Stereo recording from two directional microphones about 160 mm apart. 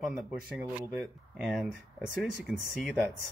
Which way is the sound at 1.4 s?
Centre (ahead or behind).